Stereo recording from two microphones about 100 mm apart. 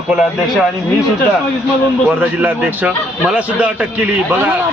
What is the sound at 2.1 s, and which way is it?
Speech, 15° right (ahead or behind).